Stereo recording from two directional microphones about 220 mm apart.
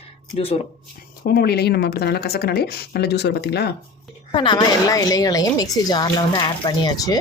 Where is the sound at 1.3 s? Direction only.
45° left (ahead or behind).